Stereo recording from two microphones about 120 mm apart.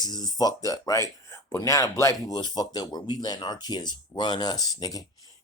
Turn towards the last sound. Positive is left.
turn(degrees=30)  # may be behind; listen again after turning